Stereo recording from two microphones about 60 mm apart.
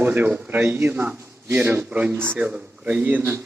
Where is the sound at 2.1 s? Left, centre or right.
Right.